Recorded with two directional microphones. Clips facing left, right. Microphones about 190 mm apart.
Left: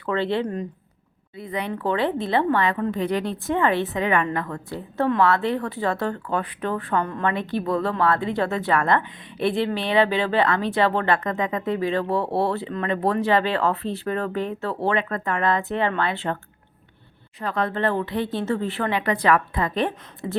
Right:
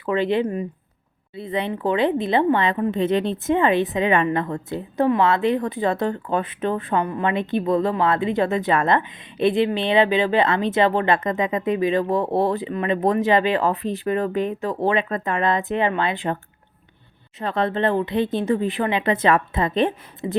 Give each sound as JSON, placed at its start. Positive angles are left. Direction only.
{"t": 0.0, "sound": "a woman's voice", "side_deg": -15}
{"t": 17.4, "sound": "a woman's voice", "side_deg": -25}